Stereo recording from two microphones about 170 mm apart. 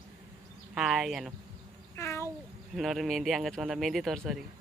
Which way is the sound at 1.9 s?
15° left (ahead or behind).